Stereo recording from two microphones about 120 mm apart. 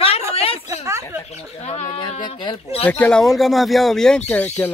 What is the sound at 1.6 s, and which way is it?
Speech, 65° left (ahead or behind).